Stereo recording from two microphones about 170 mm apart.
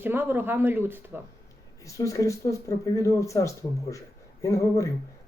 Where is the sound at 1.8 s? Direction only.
20° left (ahead or behind).